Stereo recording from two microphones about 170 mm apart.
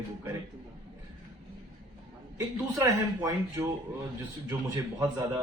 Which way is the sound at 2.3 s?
20° right (ahead or behind).